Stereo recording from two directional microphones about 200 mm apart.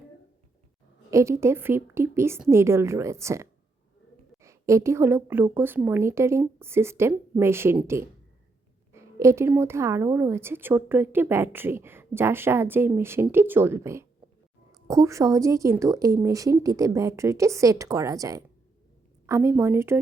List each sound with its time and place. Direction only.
1.1 s a woman's voice: 15° right (ahead or behind)
4.4 s a woman's voice: 15° right (ahead or behind)